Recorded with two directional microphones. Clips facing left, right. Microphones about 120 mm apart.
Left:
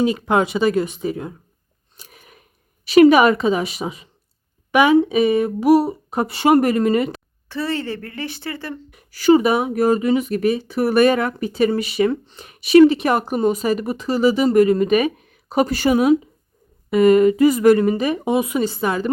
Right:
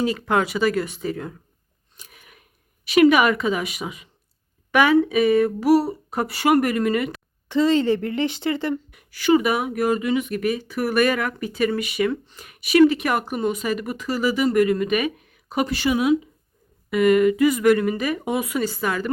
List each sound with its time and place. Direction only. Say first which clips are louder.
0.0 s speech: left 4 dB; 20° left (ahead or behind)
2.0 s a sound: left 3 dB; 35° left (ahead or behind)
2.8 s speech: left 5 dB; 30° left (ahead or behind)
4.7 s speech: left 3 dB; 15° left (ahead or behind)
7.4 s speech: right 6 dB; 15° right (ahead or behind)
8.9 s speech: left 6 dB; 35° left (ahead or behind)